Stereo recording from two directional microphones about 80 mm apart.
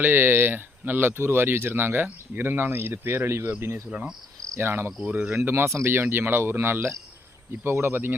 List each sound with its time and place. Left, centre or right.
0.0 s speech: right
3.8 s cricket: centre
4.4 s cricket: right
4.6 s speech: right
5.4 s speech: right